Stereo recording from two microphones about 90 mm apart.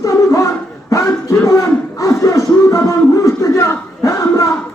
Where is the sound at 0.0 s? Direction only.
35° left (ahead or behind).